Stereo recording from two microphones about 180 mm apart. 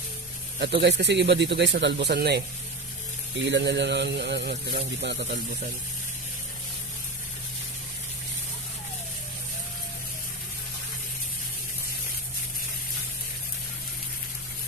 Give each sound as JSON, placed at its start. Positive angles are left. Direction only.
{"t": 0.6, "sound": "a man's voice", "side_deg": -70}
{"t": 3.3, "sound": "a man's voice", "side_deg": -80}